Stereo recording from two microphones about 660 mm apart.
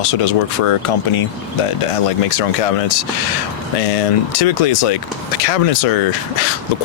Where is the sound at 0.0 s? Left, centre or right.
Left.